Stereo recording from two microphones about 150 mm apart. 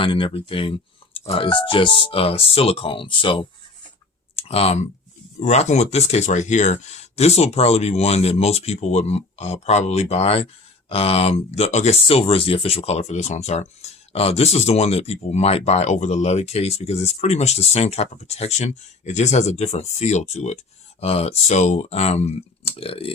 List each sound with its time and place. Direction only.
0.0 s speech: 35° left (ahead or behind)